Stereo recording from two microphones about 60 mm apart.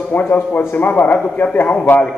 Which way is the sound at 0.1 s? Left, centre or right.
Left.